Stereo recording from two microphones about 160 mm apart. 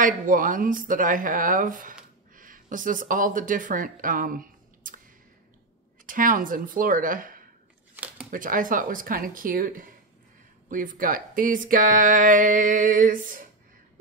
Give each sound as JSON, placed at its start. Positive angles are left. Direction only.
{"t": 0.0, "sound": "speech", "side_deg": -55}
{"t": 6.0, "sound": "speech", "side_deg": -60}
{"t": 7.9, "sound": "a sound", "side_deg": -10}
{"t": 8.3, "sound": "speech", "side_deg": -60}